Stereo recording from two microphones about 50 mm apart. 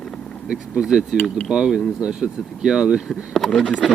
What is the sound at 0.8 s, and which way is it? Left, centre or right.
Speech, centre.